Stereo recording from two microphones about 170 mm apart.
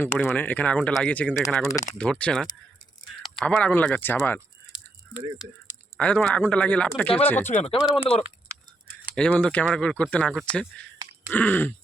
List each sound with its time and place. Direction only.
0.0 s speech: 15° left (ahead or behind)
6.0 s speech: 5° left (ahead or behind)
7.4 s speech: 40° left (ahead or behind)
9.1 s speech: 5° left (ahead or behind)